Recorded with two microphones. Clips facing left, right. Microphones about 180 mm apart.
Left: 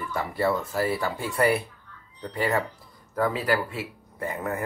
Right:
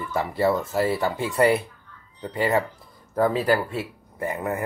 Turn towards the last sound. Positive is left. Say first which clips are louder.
# right 3 dB
turn(degrees=-20)  # may be behind; listen again after turning